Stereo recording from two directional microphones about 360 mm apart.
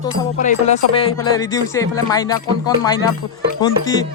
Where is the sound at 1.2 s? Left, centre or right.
Centre.